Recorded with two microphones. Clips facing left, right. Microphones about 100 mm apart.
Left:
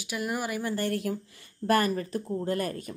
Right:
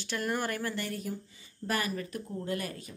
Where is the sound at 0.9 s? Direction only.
85° left.